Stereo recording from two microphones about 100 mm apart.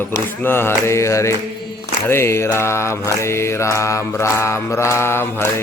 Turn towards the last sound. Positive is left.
turn(degrees=25)  # may be behind; listen again after turning